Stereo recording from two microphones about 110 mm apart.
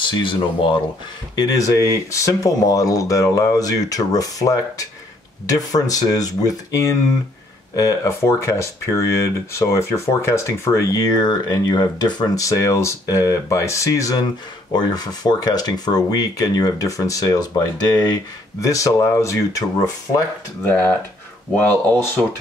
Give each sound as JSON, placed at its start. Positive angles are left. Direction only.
{"t": 0.0, "sound": "speech", "side_deg": 45}
{"t": 1.3, "sound": "speech", "side_deg": 35}
{"t": 11.1, "sound": "speech", "side_deg": 40}